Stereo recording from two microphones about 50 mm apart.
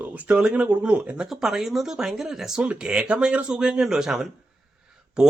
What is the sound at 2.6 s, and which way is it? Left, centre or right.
Speech, right.